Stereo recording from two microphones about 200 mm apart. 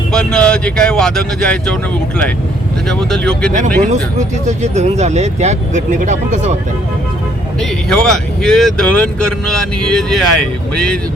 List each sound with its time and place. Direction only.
0.1 s speech: 5° left (ahead or behind)
4.2 s speech: 35° right (ahead or behind)
7.6 s speech: 5° left (ahead or behind)